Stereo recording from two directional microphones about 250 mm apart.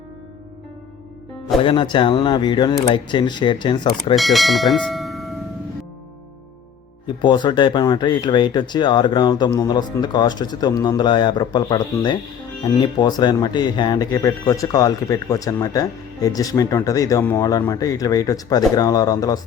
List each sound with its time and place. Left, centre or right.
1.6 s speech: centre
4.1 s speech: centre
7.2 s speech: centre